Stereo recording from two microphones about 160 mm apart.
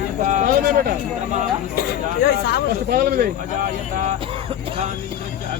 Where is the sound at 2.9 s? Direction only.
70° right (ahead or behind).